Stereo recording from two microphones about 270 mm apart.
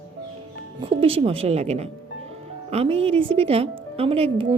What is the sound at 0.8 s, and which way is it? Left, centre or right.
A woman's voice, centre.